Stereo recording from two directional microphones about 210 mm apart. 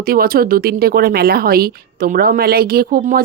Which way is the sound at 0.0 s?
45° right (ahead or behind).